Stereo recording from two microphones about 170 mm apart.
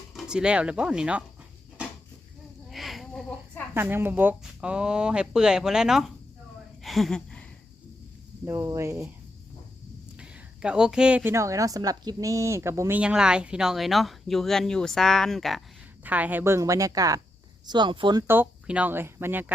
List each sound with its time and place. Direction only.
0.1 s speech: 5° right (ahead or behind)
2.6 s a sound: centre (ahead or behind)
3.8 s a woman's voice: 15° right (ahead or behind)
6.8 s a sound: centre (ahead or behind)
8.4 s speech: 15° right (ahead or behind)
10.2 s a woman's voice: 5° right (ahead or behind)
16.0 s a woman's voice: 10° right (ahead or behind)